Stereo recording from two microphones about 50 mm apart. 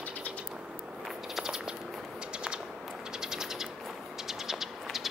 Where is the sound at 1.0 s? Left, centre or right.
Centre.